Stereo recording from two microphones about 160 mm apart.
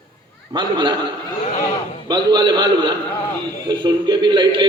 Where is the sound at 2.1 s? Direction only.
25° right (ahead or behind).